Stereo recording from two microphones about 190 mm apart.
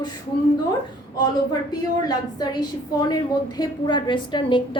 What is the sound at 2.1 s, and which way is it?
A woman's voice, 20° left (ahead or behind).